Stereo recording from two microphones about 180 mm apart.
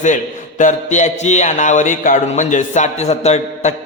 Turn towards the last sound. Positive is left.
turn(degrees=40)  # may be behind; listen again after turning